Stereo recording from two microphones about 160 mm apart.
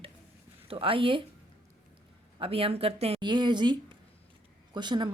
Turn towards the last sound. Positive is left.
turn(degrees=-30)  # may be behind; listen again after turning